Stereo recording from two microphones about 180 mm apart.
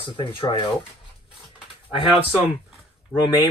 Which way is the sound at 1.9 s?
30° left (ahead or behind).